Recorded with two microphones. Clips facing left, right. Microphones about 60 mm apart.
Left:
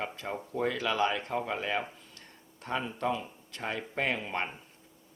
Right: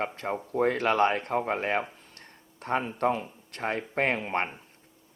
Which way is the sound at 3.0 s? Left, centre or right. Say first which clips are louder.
Right 5 dB; right.